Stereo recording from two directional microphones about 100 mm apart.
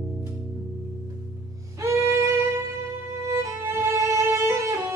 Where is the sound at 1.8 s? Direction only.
30° right (ahead or behind).